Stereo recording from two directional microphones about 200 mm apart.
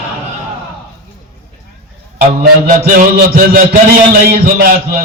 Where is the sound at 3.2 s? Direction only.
45° right (ahead or behind).